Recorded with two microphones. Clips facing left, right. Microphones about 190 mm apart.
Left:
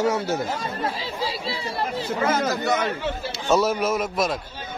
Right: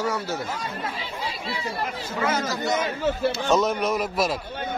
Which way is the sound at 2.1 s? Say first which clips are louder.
Left 2 dB; 45° left (ahead or behind).